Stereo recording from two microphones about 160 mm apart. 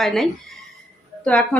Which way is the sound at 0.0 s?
Centre (ahead or behind).